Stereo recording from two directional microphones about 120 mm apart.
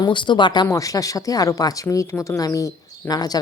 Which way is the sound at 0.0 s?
40° left (ahead or behind).